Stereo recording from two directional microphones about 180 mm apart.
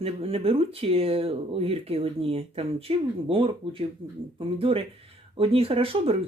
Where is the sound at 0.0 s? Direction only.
35° right (ahead or behind).